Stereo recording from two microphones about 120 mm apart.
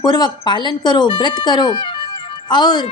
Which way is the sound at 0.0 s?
35° left (ahead or behind).